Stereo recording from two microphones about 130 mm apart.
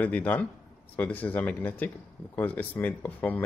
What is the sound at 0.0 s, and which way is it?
Speech, 10° left (ahead or behind).